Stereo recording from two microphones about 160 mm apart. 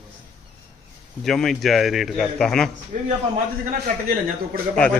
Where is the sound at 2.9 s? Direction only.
55° right (ahead or behind).